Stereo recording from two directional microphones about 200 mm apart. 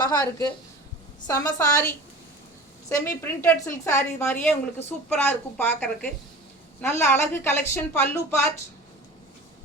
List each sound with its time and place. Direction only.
0.0 s a woman's voice: 20° left (ahead or behind)
2.9 s a woman's voice: 15° left (ahead or behind)